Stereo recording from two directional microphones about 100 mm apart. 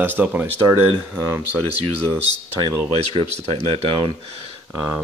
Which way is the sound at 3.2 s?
85° right.